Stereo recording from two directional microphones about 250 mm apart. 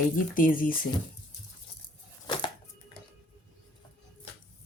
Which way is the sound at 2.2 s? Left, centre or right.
Centre.